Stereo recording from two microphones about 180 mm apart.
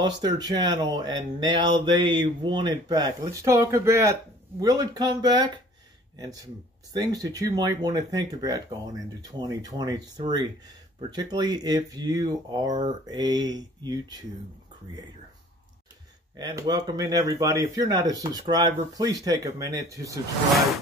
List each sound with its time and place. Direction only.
0.0 s speech: 20° right (ahead or behind)
16.3 s speech: 20° right (ahead or behind)